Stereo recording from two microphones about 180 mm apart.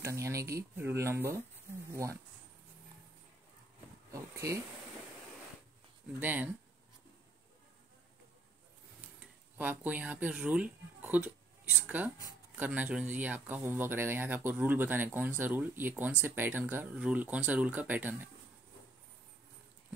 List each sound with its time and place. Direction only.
0.0 s speech: 15° right (ahead or behind)
4.1 s speech: 15° right (ahead or behind)
6.1 s speech: 10° right (ahead or behind)
9.6 s speech: 10° right (ahead or behind)